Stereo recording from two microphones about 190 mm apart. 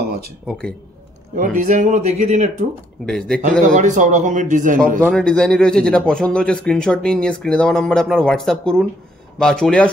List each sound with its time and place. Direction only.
0.5 s a man's voice: 5° left (ahead or behind)
1.3 s a man's voice: 45° right (ahead or behind)
3.1 s a man's voice: 5° left (ahead or behind)
3.6 s a man's voice: 40° right (ahead or behind)
5.0 s a man's voice: 5° left (ahead or behind)